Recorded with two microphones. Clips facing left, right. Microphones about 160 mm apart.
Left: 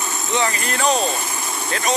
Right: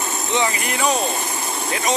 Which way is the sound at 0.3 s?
15° right (ahead or behind).